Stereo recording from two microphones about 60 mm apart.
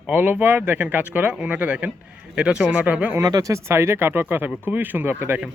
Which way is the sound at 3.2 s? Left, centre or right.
Right.